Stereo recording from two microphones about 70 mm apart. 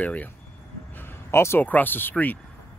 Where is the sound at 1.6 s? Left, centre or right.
Left.